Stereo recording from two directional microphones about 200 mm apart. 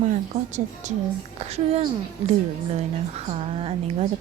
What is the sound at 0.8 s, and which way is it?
A woman's voice, 35° right (ahead or behind).